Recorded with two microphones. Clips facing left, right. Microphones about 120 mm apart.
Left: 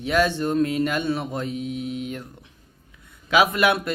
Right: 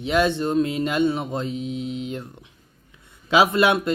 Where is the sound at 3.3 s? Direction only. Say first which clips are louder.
Right 2 dB; 25° right (ahead or behind).